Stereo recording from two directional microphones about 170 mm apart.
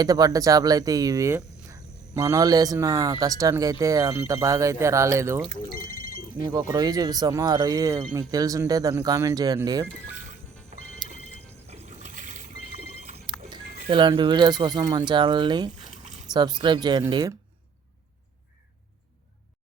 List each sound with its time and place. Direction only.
0.0 s speech: 20° right (ahead or behind)
5.7 s telephone bell ringing: 60° left (ahead or behind)
6.4 s speech: 25° right (ahead or behind)
11.7 s boat: 45° right (ahead or behind)
13.9 s speech: 30° right (ahead or behind)